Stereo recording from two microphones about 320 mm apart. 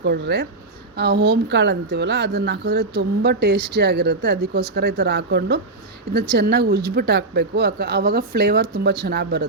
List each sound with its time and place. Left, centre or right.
0.0 s a woman's voice: right